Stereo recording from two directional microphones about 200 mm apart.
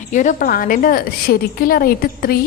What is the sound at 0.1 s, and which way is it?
A woman's voice, 40° left (ahead or behind).